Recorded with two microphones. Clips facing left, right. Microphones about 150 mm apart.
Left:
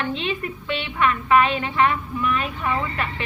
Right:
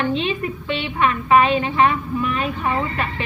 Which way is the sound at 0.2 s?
25° right (ahead or behind).